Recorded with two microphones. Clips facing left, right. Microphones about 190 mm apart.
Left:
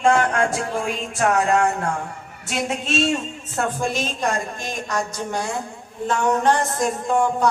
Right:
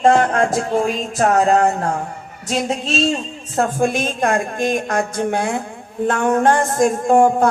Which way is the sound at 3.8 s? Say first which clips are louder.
Right 5 dB; 55° right (ahead or behind).